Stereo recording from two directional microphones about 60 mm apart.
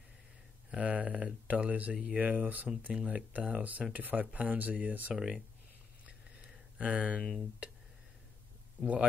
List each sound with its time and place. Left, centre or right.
0.7 s speech: right
2.9 s speech: centre
5.1 s speech: centre
6.0 s a sound: right
7.2 s speech: centre